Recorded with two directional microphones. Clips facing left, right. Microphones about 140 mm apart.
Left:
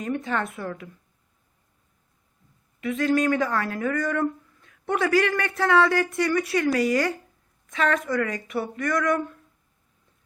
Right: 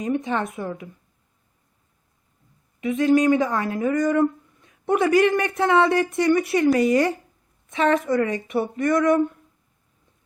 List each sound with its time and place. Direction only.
0.0 s speech: 20° right (ahead or behind)
2.8 s speech: 20° right (ahead or behind)